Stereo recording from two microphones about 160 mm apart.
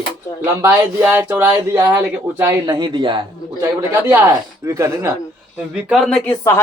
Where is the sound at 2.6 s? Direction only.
30° right (ahead or behind).